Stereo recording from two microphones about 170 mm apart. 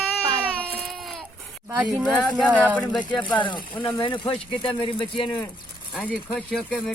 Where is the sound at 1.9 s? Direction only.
5° left (ahead or behind).